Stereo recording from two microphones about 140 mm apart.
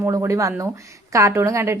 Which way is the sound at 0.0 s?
20° right (ahead or behind).